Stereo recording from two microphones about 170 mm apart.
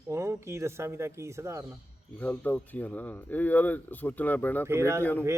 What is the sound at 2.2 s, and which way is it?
Speech, 10° left (ahead or behind).